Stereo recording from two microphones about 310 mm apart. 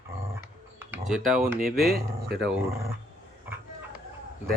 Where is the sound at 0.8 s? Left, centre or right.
Centre.